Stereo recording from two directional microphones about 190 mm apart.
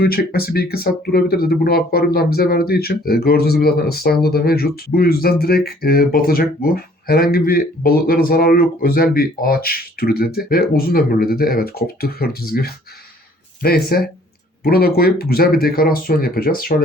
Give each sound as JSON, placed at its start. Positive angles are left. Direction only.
{"t": 0.0, "sound": "speech", "side_deg": 55}